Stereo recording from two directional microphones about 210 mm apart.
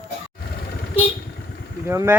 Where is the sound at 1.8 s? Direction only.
10° right (ahead or behind).